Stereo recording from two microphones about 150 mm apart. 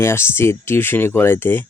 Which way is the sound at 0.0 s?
15° left (ahead or behind).